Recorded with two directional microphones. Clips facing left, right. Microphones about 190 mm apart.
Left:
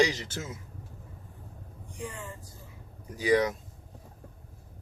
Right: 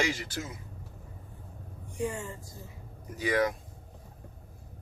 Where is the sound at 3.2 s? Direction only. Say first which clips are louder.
Left 3 dB; 20° left (ahead or behind).